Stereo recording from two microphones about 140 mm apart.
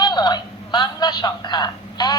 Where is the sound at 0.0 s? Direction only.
30° left (ahead or behind).